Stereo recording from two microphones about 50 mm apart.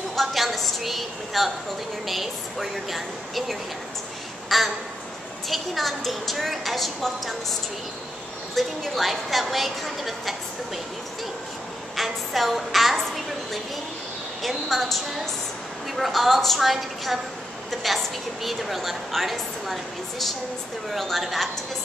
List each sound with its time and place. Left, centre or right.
0.1 s a woman's voice: centre
8.5 s a woman's voice: centre
12.0 s music: centre
14.4 s a woman's voice: centre